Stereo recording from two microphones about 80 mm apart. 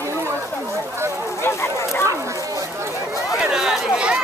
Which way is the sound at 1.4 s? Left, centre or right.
Left.